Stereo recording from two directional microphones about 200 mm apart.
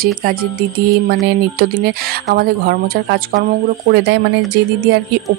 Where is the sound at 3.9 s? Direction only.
60° right (ahead or behind).